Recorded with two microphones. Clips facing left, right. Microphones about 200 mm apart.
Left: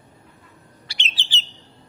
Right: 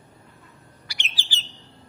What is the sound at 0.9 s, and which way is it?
Bird, 25° left (ahead or behind).